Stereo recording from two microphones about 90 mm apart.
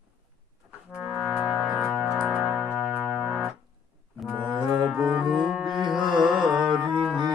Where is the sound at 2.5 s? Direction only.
10° left (ahead or behind).